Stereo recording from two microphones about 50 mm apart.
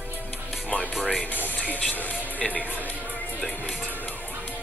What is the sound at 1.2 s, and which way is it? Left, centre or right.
Speech, left.